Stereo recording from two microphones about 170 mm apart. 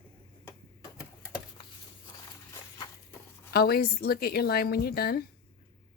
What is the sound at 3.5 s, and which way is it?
Speech, 65° left (ahead or behind).